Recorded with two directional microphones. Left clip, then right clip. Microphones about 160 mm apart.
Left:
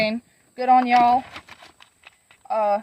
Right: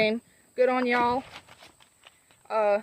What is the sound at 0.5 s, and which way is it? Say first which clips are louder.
Speech: left 7 dB; 20° right (ahead or behind).